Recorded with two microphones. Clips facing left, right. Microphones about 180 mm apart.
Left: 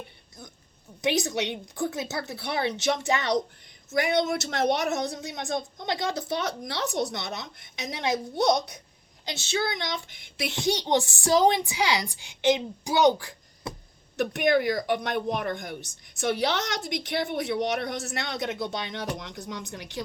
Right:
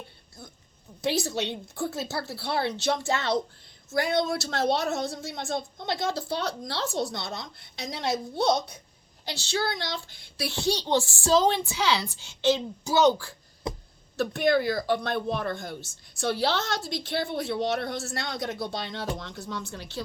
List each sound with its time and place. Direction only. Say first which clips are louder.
1.0 s a woman's voice: left 1 dB; 20° left (ahead or behind)